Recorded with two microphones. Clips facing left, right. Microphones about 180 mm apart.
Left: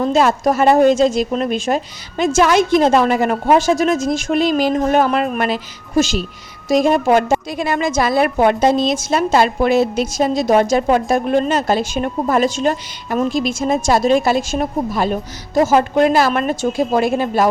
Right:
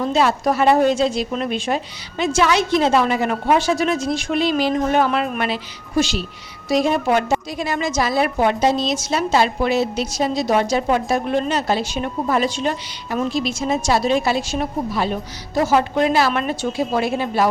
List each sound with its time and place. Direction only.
0.1 s a woman's voice: 45° left (ahead or behind)